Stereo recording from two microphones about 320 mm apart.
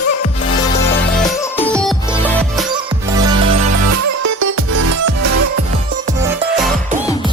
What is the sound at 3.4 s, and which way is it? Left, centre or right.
Music, right.